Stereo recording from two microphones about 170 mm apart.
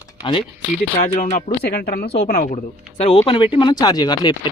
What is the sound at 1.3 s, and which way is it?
Speech, 45° left (ahead or behind).